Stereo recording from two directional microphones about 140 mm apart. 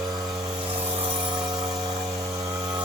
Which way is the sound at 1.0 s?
35° right (ahead or behind).